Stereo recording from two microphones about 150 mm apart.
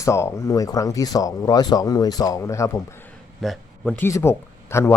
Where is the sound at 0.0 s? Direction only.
20° left (ahead or behind).